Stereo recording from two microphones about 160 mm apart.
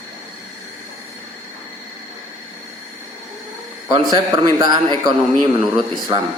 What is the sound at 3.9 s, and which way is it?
Speech, 30° right (ahead or behind).